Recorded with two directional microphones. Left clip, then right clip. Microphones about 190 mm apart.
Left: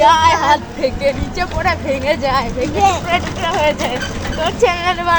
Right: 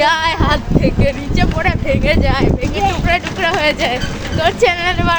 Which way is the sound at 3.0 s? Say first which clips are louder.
Right 2 dB; 35° right (ahead or behind).